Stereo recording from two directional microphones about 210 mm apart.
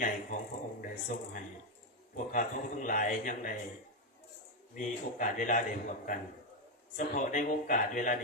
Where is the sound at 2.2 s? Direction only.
40° left (ahead or behind).